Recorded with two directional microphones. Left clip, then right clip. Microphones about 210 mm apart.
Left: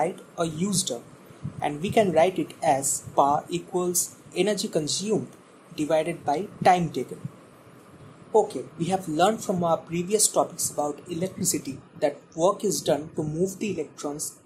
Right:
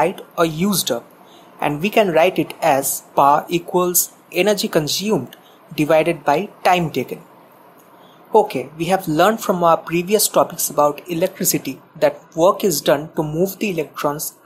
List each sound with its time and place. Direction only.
0.0 s speech: 20° right (ahead or behind)
8.3 s speech: 20° right (ahead or behind)